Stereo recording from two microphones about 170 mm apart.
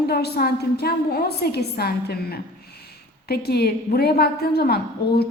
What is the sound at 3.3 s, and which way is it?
A woman's voice, 70° left (ahead or behind).